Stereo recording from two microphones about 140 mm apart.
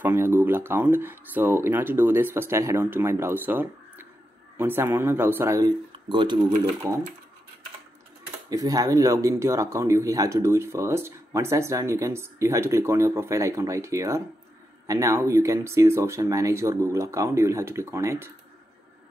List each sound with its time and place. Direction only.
0.0 s speech: 15° right (ahead or behind)
6.0 s speech: 35° right (ahead or behind)
8.5 s speech: 25° right (ahead or behind)